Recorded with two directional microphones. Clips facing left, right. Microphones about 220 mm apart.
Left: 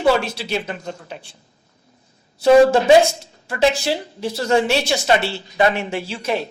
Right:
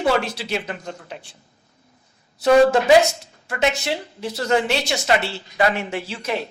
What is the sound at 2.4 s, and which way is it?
A woman's voice, 30° left (ahead or behind).